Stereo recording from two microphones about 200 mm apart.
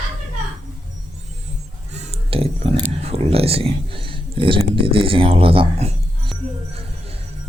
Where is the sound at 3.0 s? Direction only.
30° right (ahead or behind).